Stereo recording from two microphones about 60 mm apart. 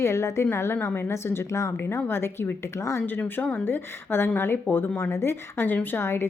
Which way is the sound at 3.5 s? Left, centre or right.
Left.